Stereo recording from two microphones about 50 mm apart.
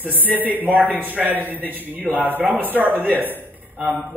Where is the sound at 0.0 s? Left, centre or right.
Right.